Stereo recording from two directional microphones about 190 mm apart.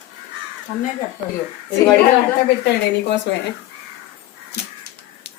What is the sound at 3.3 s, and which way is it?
Speech, 70° left (ahead or behind).